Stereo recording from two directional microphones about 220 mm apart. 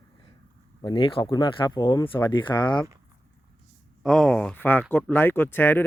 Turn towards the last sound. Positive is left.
turn(degrees=10)  # may be behind; listen again after turning